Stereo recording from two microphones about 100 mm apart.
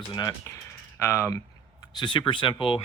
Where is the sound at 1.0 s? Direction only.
25° left (ahead or behind).